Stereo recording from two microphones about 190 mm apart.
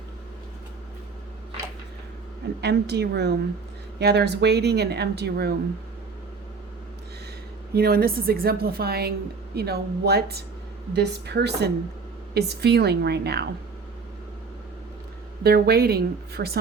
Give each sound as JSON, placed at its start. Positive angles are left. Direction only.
{"t": 2.6, "sound": "speech", "side_deg": -60}
{"t": 7.7, "sound": "a woman's voice", "side_deg": -55}
{"t": 15.4, "sound": "speech", "side_deg": -55}